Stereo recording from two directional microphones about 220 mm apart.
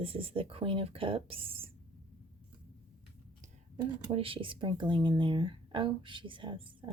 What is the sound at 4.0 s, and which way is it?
Speech, 25° right (ahead or behind).